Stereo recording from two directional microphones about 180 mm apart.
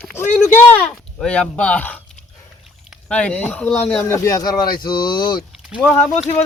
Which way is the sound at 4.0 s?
15° left (ahead or behind).